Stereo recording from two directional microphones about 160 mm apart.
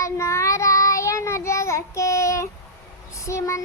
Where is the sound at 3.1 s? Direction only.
20° left (ahead or behind).